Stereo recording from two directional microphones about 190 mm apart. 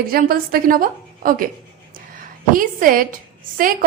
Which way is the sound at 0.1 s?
50° right (ahead or behind).